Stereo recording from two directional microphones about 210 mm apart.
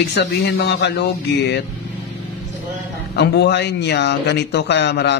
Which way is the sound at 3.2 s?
55° left (ahead or behind).